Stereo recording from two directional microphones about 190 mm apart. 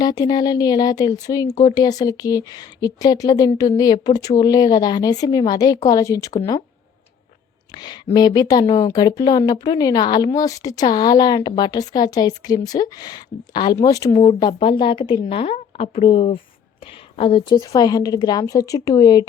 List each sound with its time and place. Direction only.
0.0 s a woman's voice: 20° left (ahead or behind)
7.7 s a woman's voice: 20° left (ahead or behind)